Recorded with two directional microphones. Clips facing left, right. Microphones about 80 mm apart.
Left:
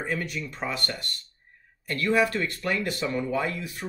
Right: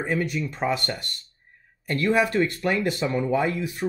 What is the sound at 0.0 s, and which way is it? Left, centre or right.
Speech, centre.